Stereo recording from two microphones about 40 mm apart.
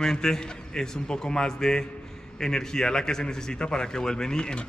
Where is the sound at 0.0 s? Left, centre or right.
Centre.